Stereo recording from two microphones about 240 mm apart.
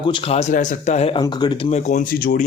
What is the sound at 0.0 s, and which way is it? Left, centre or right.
A man's voice, left.